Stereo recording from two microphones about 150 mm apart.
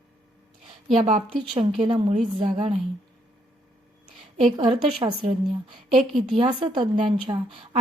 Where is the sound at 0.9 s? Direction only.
45° right (ahead or behind).